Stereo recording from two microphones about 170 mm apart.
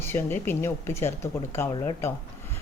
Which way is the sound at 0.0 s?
15° left (ahead or behind).